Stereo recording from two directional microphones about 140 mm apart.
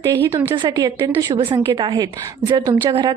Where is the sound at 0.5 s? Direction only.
30° right (ahead or behind).